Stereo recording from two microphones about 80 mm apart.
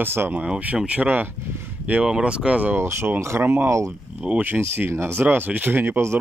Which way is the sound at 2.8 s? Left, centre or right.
Right.